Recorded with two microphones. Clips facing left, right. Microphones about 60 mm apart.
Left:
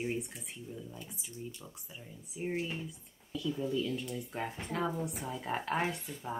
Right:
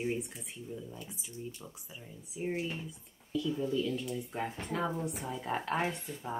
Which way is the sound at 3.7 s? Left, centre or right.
Centre.